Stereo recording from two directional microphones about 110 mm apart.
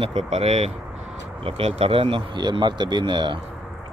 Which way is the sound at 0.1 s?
80° right.